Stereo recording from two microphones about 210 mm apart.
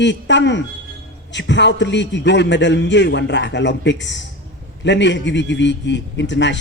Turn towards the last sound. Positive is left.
turn(degrees=55)  # may be behind; listen again after turning